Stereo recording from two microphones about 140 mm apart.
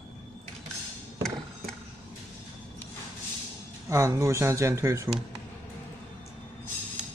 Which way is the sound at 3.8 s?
20° right (ahead or behind).